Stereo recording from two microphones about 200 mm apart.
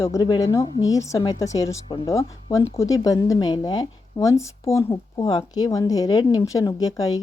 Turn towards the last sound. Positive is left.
turn(degrees=20)  # may be behind; listen again after turning